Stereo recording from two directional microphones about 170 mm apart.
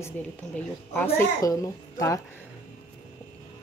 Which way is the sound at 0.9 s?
15° left (ahead or behind).